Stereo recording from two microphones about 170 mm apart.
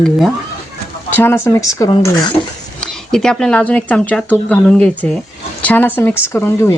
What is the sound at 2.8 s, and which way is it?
Speech, 5° left (ahead or behind).